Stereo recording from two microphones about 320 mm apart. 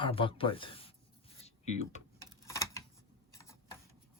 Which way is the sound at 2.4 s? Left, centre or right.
Centre.